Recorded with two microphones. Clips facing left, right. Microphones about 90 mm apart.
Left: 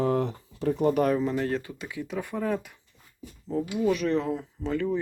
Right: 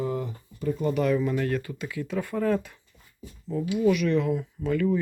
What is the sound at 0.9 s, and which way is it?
Speech, 45° left (ahead or behind).